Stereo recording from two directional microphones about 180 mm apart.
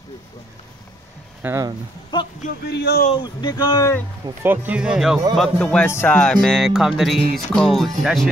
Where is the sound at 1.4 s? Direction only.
15° right (ahead or behind).